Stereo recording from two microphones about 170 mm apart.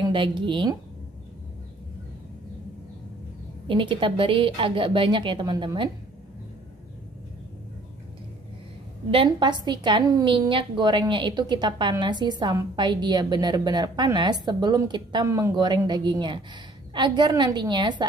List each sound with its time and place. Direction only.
0.0 s a woman's voice: 30° right (ahead or behind)
3.6 s a woman's voice: 30° right (ahead or behind)
9.1 s a woman's voice: 30° right (ahead or behind)